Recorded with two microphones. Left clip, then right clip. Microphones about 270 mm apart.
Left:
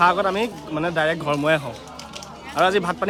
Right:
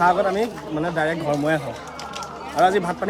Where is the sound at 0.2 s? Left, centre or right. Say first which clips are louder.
Right 1 dB; centre.